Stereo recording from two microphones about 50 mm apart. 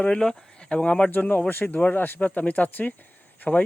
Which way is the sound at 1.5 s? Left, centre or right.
Left.